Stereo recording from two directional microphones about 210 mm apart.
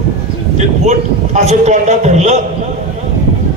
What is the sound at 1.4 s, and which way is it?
Speech, 30° right (ahead or behind).